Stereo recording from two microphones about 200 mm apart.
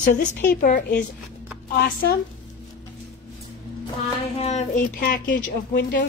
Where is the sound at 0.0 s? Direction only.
40° left (ahead or behind).